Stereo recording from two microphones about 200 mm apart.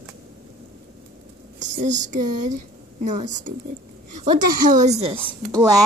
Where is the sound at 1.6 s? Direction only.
35° right (ahead or behind).